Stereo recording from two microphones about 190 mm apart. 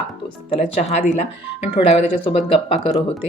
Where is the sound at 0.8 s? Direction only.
35° left (ahead or behind).